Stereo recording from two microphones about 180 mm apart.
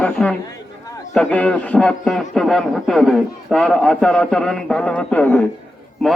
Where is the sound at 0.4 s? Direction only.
20° left (ahead or behind).